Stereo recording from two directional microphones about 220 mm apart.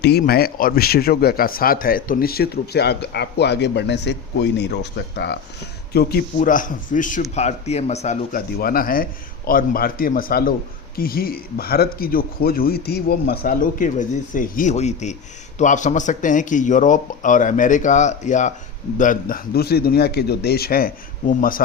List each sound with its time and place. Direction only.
0.0 s a man's voice: 45° left (ahead or behind)